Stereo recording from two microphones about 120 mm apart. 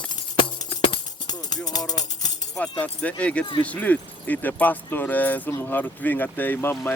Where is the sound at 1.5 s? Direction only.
35° left (ahead or behind).